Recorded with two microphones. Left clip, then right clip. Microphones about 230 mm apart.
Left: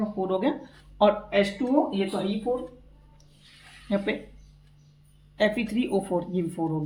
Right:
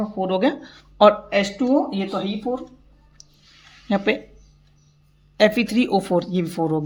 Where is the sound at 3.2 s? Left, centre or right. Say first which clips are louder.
Right 12 dB; right.